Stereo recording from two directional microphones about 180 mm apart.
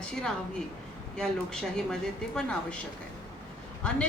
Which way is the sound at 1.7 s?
5° left (ahead or behind).